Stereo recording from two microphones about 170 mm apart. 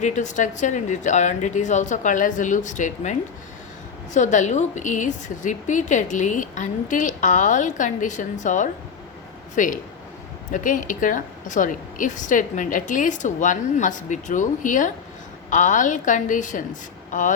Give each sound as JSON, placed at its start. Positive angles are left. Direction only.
{"t": 0.0, "sound": "speech", "side_deg": 45}